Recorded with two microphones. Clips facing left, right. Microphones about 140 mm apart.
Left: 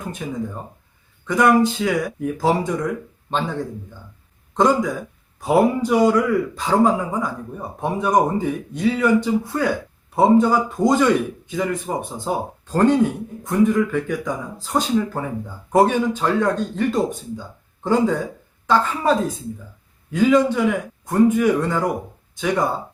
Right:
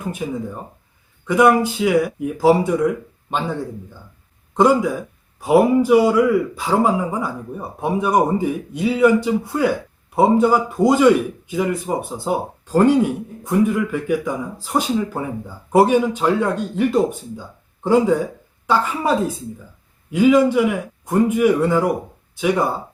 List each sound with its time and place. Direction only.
0.2 s speech: 10° right (ahead or behind)
4.5 s speech: 10° right (ahead or behind)